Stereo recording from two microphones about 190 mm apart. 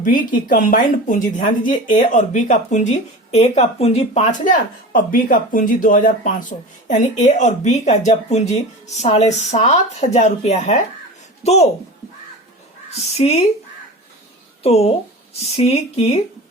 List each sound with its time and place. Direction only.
0.0 s speech: 45° left (ahead or behind)
12.9 s speech: 35° left (ahead or behind)
14.6 s speech: 35° left (ahead or behind)